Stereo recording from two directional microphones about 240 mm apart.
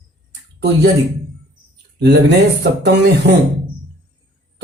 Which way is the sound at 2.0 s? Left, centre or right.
Right.